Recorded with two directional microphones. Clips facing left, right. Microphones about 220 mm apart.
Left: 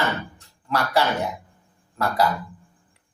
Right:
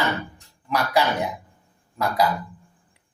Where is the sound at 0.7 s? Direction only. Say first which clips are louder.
Even; 15° right (ahead or behind).